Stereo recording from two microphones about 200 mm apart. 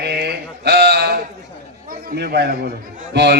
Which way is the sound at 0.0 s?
55° right (ahead or behind).